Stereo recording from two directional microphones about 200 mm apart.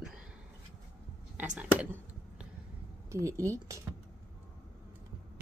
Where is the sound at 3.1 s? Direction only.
15° right (ahead or behind).